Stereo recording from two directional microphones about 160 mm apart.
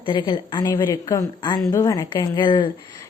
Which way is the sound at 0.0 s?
30° left (ahead or behind).